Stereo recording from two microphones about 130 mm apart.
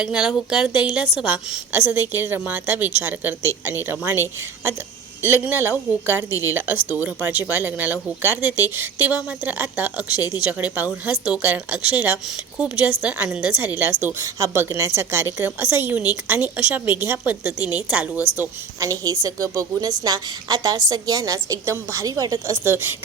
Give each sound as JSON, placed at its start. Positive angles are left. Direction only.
{"t": 0.0, "sound": "a woman's voice", "side_deg": -5}
{"t": 1.7, "sound": "a woman's voice", "side_deg": -15}
{"t": 18.8, "sound": "a woman's voice", "side_deg": -25}